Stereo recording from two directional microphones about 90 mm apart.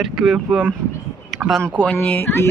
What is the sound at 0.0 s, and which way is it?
Speech, 5° right (ahead or behind).